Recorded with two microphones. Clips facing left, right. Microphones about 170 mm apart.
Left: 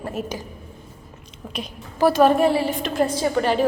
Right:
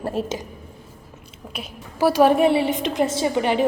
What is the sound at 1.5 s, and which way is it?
A woman's voice, 10° right (ahead or behind).